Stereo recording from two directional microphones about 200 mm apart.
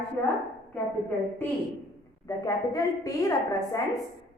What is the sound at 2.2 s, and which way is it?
A woman's voice, 15° left (ahead or behind).